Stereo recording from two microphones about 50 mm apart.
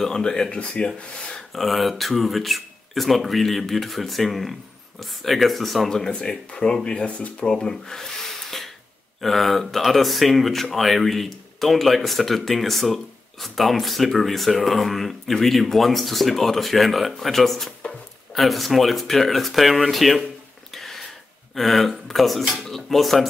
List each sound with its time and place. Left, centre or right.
0.0 s speech: centre
1.5 s speech: centre
20.7 s a sound: centre
21.5 s speech: centre